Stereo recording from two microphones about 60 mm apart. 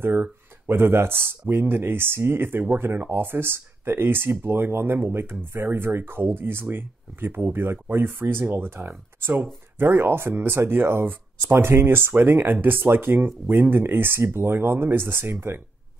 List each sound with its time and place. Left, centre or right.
0.0 s speech: right